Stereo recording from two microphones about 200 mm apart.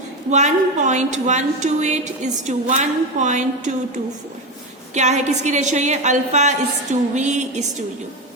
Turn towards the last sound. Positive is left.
turn(degrees=-35)  # may be behind; listen again after turning